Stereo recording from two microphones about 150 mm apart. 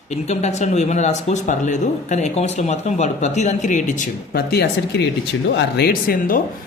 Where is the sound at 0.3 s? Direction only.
50° left (ahead or behind); by 4.7 s 90° left.